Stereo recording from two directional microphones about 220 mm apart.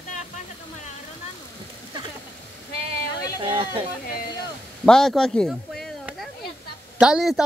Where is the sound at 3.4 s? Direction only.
25° right (ahead or behind).